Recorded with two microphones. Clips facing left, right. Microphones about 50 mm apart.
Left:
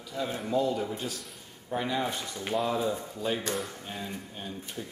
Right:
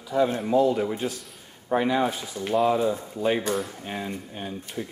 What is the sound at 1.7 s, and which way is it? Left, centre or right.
Speech, right.